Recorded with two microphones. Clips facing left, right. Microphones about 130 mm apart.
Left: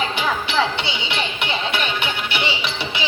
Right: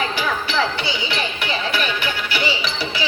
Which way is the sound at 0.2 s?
25° left (ahead or behind).